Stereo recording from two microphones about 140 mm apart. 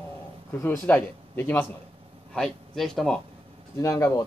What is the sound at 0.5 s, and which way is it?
Speech, 15° left (ahead or behind).